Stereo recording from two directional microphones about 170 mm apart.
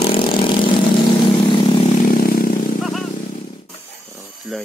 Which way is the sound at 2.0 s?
60° left (ahead or behind).